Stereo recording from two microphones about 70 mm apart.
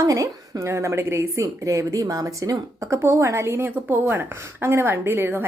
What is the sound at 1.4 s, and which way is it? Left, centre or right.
A woman's voice, right.